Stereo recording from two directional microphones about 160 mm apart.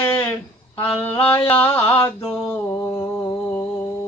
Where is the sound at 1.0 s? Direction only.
15° left (ahead or behind).